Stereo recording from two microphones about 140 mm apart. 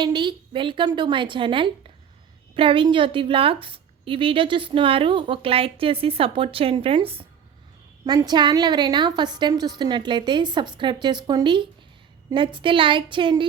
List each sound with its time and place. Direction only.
0.0 s a woman's voice: 35° right (ahead or behind)
8.0 s a woman's voice: 30° right (ahead or behind)